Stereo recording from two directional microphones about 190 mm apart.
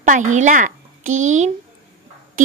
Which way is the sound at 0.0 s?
45° right (ahead or behind).